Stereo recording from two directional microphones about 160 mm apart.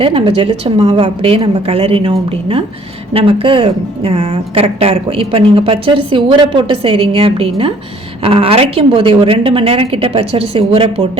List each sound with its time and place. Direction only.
0.0 s a woman's voice: 35° right (ahead or behind)